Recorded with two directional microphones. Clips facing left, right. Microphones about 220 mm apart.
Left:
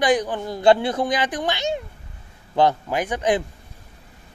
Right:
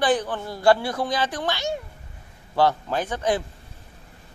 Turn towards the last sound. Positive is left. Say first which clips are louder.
# left 3 dB
turn(degrees=15)  # may be behind; listen again after turning